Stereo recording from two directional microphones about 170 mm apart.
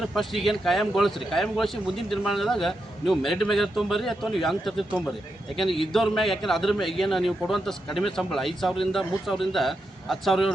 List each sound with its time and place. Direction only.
0.0 s a man's voice: centre (ahead or behind)